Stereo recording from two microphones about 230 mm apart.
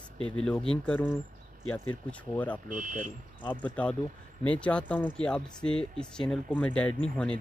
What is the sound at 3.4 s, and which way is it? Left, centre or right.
Speech, centre.